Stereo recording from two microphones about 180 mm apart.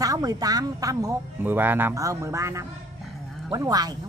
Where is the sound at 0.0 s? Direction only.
20° right (ahead or behind).